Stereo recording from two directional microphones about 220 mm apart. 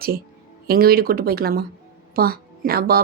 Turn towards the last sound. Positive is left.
turn(degrees=-45)  # may be behind; listen again after turning